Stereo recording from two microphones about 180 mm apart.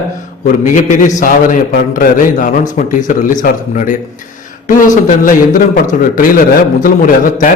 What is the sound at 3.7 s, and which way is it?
A man's voice, 45° left (ahead or behind).